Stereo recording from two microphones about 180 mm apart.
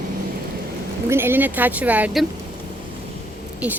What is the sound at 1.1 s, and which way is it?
A woman's voice, 10° right (ahead or behind).